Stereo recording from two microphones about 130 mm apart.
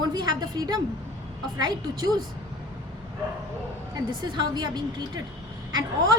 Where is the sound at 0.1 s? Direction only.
30° right (ahead or behind).